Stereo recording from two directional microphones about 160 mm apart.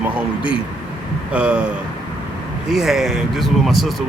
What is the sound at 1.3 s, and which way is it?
Speech, 5° right (ahead or behind).